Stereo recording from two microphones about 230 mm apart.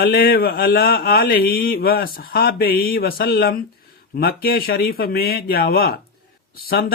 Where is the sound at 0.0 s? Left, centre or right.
Left.